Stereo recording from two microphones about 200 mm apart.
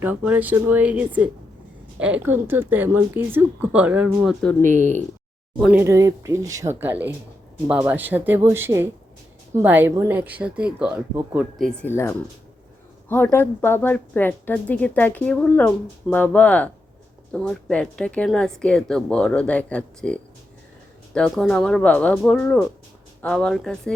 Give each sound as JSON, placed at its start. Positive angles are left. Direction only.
{"t": 0.0, "sound": "speech", "side_deg": -10}
{"t": 4.7, "sound": "speech", "side_deg": -35}
{"t": 5.5, "sound": "a woman's voice", "side_deg": -5}